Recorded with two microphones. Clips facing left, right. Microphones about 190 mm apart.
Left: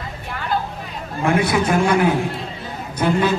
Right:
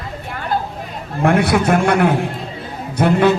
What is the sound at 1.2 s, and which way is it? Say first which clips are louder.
Speech: right 3 dB; 60° right (ahead or behind).